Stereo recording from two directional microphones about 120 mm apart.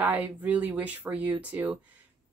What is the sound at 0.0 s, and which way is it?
A woman's voice, 15° right (ahead or behind).